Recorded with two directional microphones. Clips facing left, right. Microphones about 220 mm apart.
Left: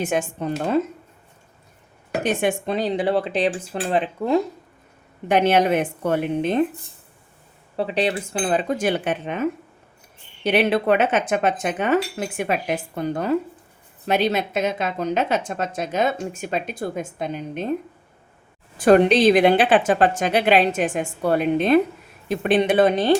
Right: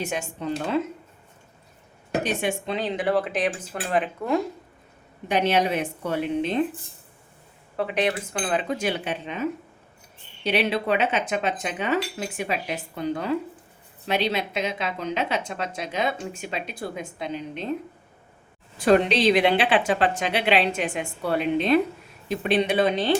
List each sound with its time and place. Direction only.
0.0 s a woman's voice: 50° left (ahead or behind)
2.2 s speech: 55° left (ahead or behind); by 4.4 s 30° left (ahead or behind)
5.3 s a woman's voice: 55° left (ahead or behind)
7.8 s a woman's voice: 30° left (ahead or behind); by 17.7 s 50° left (ahead or behind)
18.8 s a woman's voice: 50° left (ahead or behind)